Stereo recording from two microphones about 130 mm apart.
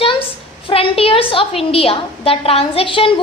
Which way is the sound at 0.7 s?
45° left (ahead or behind).